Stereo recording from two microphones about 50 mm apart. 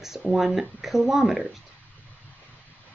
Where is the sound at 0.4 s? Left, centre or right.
Centre.